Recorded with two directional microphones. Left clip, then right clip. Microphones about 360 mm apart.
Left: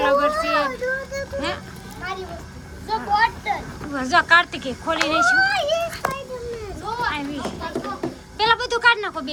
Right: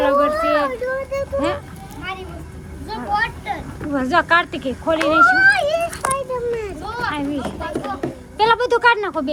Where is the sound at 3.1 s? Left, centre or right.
Centre.